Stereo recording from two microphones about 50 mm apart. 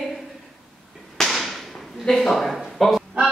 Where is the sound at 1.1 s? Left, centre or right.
Centre.